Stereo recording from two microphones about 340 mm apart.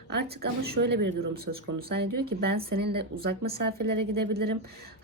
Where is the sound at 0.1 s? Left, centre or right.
Right.